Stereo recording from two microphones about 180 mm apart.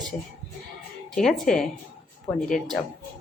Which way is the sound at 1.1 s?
Centre (ahead or behind).